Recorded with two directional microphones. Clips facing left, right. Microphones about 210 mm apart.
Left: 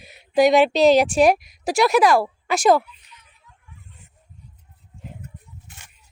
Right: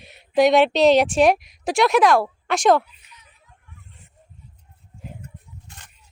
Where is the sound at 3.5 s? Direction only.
55° left (ahead or behind).